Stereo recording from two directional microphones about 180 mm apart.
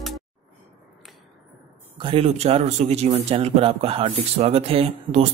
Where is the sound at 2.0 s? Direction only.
30° right (ahead or behind).